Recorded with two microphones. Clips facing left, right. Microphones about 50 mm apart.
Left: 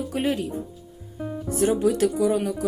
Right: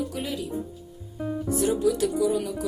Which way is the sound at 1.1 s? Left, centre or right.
Centre.